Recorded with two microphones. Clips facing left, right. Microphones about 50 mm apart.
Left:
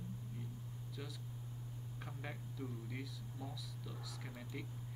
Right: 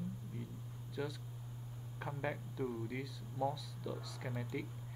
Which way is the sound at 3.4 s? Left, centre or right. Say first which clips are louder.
Right 13 dB; centre.